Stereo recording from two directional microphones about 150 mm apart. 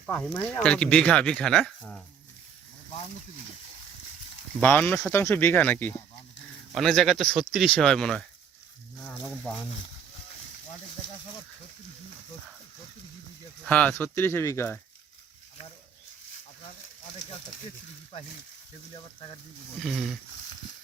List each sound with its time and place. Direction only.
0.0 s speech: 10° left (ahead or behind)
4.6 s speech: 10° left (ahead or behind)
6.7 s speech: centre (ahead or behind)
13.7 s speech: 10° left (ahead or behind)
18.9 s speech: 35° left (ahead or behind)
19.8 s speech: centre (ahead or behind)